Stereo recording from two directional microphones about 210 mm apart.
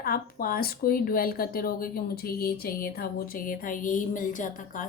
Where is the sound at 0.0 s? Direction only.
45° left (ahead or behind).